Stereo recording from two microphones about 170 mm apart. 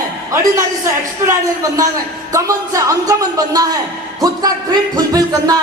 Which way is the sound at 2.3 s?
20° right (ahead or behind).